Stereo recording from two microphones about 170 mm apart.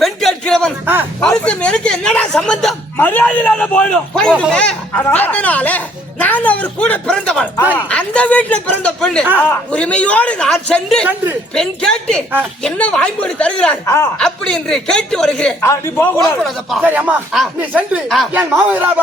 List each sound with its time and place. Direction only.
0.0 s a sound: centre (ahead or behind)
1.5 s speech: 5° left (ahead or behind)
15.6 s speech: 15° left (ahead or behind)
16.4 s speech: centre (ahead or behind)
18.5 s music: 10° right (ahead or behind)